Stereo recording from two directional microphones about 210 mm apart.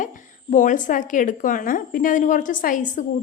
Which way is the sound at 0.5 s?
40° left (ahead or behind).